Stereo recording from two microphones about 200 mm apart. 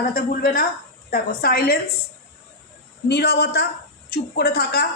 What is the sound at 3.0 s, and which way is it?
A woman's voice, 55° left (ahead or behind).